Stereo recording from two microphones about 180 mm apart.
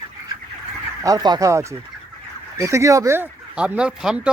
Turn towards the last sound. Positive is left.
turn(degrees=-5)  # may be behind; listen again after turning